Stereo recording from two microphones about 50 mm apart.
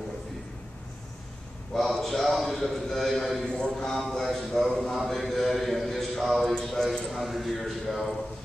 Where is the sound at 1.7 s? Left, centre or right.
Centre.